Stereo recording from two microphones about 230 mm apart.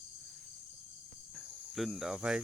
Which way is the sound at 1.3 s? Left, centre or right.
Centre.